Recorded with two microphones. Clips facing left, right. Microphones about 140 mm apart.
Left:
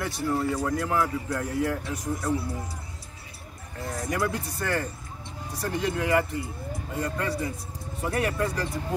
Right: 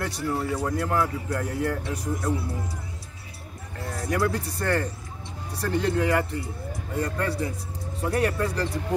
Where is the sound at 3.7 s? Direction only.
20° left (ahead or behind); by 8.5 s centre (ahead or behind).